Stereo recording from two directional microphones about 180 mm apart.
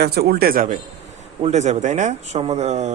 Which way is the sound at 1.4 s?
40° right (ahead or behind).